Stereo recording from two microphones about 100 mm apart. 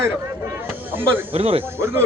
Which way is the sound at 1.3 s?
75° right (ahead or behind).